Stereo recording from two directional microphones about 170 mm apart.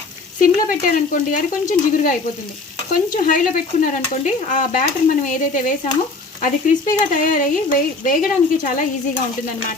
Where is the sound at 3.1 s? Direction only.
50° left (ahead or behind).